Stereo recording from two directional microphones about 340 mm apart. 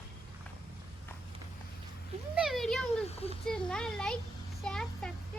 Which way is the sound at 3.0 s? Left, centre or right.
Centre.